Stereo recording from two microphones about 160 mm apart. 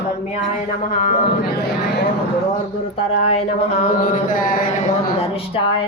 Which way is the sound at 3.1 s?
40° left (ahead or behind).